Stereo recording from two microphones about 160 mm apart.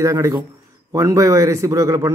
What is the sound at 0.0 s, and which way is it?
A man's voice, 20° right (ahead or behind).